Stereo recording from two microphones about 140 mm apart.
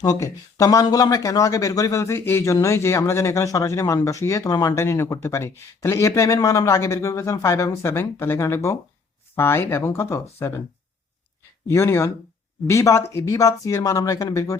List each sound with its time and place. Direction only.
0.0 s speech: 25° left (ahead or behind)
11.7 s speech: 20° left (ahead or behind)